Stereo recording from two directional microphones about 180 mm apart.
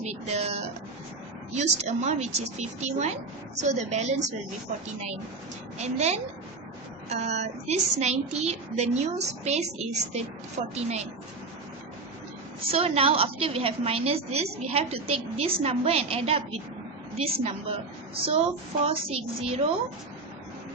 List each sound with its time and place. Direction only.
0.0 s a woman's voice: 35° right (ahead or behind)
5.8 s a woman's voice: 40° right (ahead or behind)
12.7 s a woman's voice: 30° right (ahead or behind)
18.3 s a woman's voice: 35° right (ahead or behind)